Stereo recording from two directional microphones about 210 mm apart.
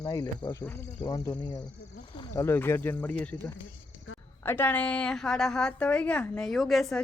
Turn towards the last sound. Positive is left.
turn(degrees=0)  # may be behind; listen again after turning